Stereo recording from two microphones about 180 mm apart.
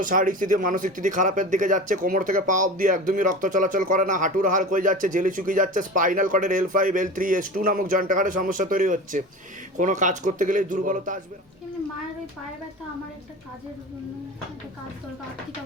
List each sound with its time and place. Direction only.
0.0 s speech: 50° right (ahead or behind)